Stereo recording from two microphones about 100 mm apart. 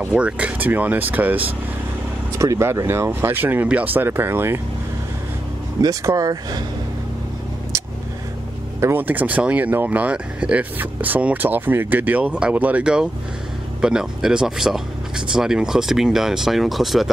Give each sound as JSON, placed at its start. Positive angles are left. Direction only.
{"t": 0.1, "sound": "speech", "side_deg": -15}
{"t": 2.3, "sound": "speech", "side_deg": -30}
{"t": 5.8, "sound": "speech", "side_deg": -35}
{"t": 8.8, "sound": "speech", "side_deg": -20}